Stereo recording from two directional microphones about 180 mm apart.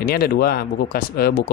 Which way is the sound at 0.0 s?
60° left (ahead or behind).